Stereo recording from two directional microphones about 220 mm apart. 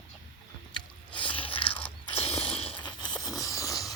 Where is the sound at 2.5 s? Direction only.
25° left (ahead or behind).